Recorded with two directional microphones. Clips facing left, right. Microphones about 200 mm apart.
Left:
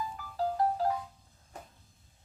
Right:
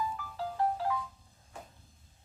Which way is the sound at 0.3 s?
40° left (ahead or behind).